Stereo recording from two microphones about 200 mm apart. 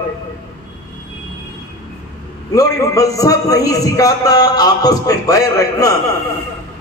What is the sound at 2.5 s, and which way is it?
A man's voice, 15° left (ahead or behind).